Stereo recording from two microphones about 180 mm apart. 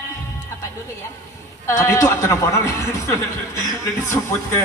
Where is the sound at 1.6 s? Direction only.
15° left (ahead or behind).